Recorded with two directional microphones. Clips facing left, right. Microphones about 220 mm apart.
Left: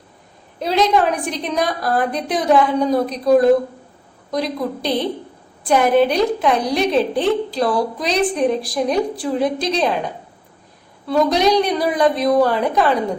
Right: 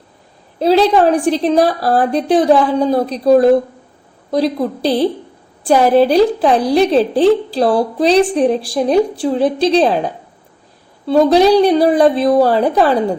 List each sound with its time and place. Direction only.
0.6 s a woman's voice: 30° right (ahead or behind)